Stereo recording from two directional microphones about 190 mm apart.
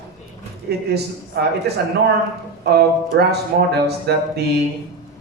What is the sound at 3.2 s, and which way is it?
Speech, 60° right (ahead or behind).